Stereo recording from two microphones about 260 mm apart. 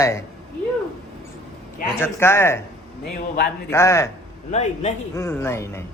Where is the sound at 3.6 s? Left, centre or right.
Centre.